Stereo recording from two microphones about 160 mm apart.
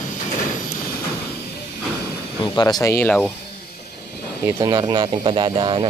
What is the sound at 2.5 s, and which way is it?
Speech, 25° left (ahead or behind).